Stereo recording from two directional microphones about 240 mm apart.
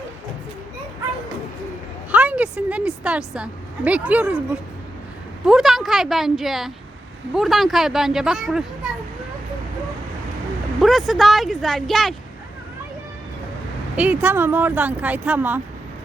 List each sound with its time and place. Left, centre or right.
2.1 s a woman's voice: centre
5.5 s speech: centre
10.8 s speech: centre
13.9 s speech: centre